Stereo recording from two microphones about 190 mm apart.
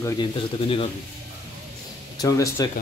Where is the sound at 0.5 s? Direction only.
30° left (ahead or behind).